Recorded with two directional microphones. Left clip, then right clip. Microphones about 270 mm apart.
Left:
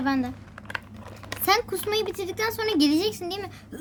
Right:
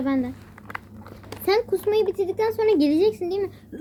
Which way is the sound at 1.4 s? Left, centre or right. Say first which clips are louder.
Right 2 dB; left.